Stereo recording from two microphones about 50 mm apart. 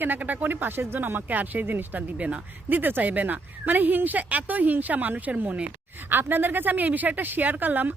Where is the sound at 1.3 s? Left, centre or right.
Right.